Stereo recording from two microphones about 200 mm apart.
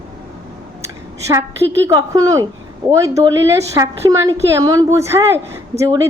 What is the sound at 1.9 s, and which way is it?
A woman's voice, 15° right (ahead or behind).